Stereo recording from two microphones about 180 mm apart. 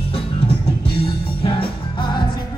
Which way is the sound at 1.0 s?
30° left (ahead or behind).